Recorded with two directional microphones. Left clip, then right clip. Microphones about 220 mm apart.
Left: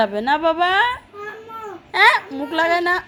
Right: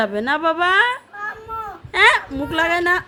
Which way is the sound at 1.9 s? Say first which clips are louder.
Even; 20° right (ahead or behind).